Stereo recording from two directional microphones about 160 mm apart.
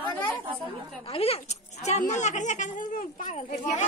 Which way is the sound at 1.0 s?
40° left (ahead or behind).